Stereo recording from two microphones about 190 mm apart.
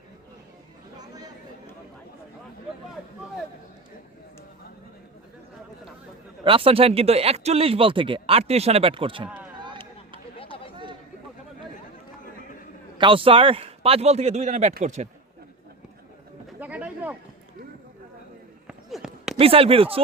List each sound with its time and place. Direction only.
0.9 s chatter: 20° right (ahead or behind)
6.4 s speech: 25° right (ahead or behind)
10.5 s chatter: 30° left (ahead or behind)
13.0 s speech: 25° right (ahead or behind)
16.6 s a sound: 5° right (ahead or behind)
18.7 s fireworks: centre (ahead or behind)
19.4 s speech: 30° right (ahead or behind)